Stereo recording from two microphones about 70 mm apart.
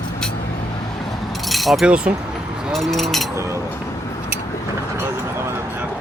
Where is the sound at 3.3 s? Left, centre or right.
Right.